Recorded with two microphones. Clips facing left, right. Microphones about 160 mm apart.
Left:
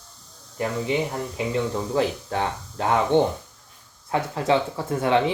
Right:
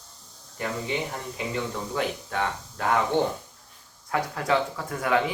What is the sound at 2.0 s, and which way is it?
Speech, 30° left (ahead or behind).